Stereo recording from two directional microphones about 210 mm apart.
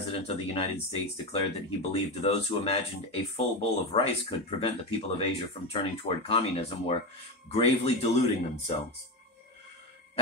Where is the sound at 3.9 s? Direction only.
25° left (ahead or behind).